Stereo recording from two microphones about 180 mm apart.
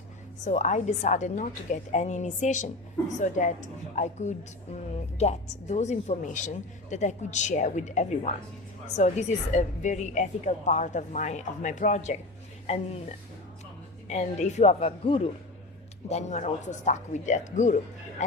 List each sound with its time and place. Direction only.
0.4 s a woman's voice: 40° left (ahead or behind)